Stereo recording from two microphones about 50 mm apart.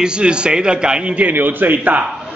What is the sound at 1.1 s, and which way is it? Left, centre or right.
Speech, right.